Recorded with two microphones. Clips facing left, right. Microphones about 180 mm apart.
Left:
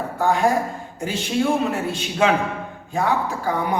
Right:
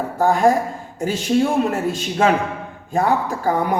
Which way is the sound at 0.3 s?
40° right (ahead or behind).